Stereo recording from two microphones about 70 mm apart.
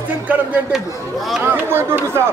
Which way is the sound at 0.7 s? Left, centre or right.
Centre.